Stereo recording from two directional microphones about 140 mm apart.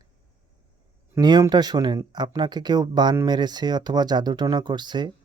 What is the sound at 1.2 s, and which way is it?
Speech, 30° right (ahead or behind).